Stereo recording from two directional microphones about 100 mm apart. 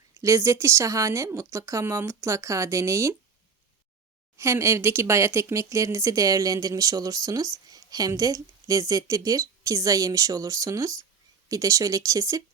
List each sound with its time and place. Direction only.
0.2 s speech: 30° right (ahead or behind)
4.4 s speech: 30° right (ahead or behind)